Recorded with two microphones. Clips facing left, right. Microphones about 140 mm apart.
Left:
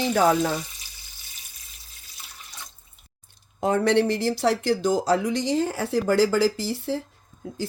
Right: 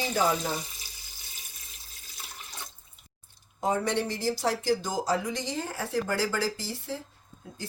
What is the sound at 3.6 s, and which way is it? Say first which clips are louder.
Speech: left 7 dB; 70° left (ahead or behind).